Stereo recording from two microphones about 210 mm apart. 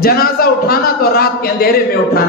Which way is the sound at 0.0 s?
45° left (ahead or behind).